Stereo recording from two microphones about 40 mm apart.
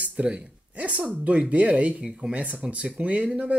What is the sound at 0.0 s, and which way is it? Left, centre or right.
Speech, right.